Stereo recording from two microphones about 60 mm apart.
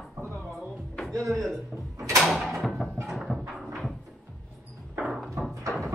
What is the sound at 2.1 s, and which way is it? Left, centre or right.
Mechanisms, centre.